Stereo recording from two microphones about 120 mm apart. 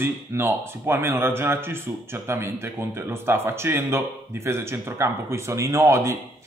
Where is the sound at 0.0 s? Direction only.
20° right (ahead or behind).